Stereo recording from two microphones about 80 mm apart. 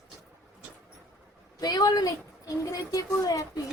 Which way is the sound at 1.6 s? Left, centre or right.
Left.